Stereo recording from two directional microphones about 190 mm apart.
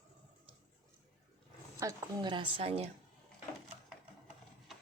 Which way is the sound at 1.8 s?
15° right (ahead or behind).